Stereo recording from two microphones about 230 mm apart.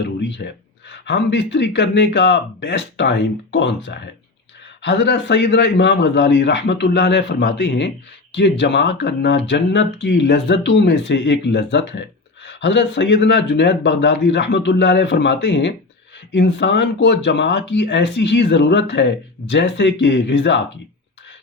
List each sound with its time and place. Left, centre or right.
0.0 s speech: left